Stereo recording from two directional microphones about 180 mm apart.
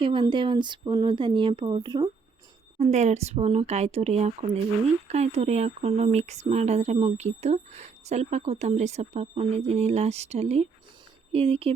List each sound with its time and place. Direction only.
0.0 s speech: 25° right (ahead or behind)
2.7 s speech: 40° right (ahead or behind)